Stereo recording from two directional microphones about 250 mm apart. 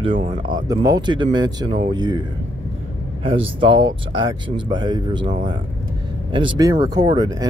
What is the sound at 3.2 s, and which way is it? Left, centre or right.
Speech, right.